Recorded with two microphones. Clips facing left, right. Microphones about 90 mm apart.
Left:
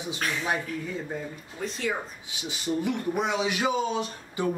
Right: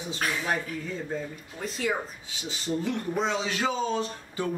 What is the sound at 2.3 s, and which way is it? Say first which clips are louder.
Speech: left 2 dB; 15° left (ahead or behind).